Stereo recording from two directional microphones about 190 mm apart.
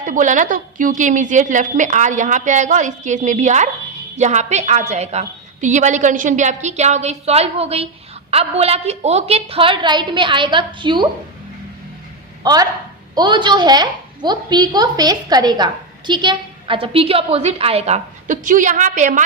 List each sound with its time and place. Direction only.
0.0 s a woman's voice: 40° right (ahead or behind); by 11.1 s 25° right (ahead or behind)
12.4 s a woman's voice: 20° right (ahead or behind); by 19.2 s 40° right (ahead or behind)